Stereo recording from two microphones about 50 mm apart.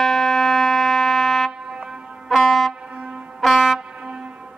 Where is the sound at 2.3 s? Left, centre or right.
Centre.